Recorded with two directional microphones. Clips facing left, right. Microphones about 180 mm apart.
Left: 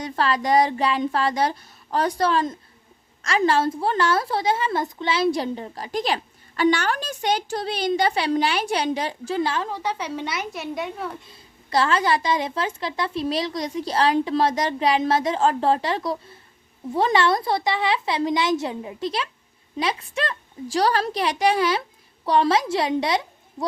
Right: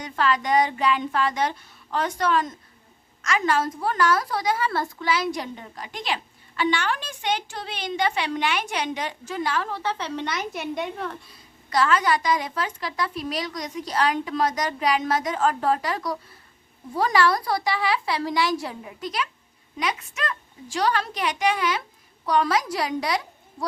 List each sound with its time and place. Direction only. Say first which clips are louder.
0.0 s a woman's voice: left 1 dB; 35° left (ahead or behind)
9.6 s a woman's voice: left 1 dB; 15° left (ahead or behind)
11.3 s a woman's voice: left 3 dB; 30° left (ahead or behind)